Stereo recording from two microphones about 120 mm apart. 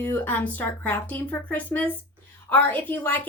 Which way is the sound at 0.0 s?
15° left (ahead or behind).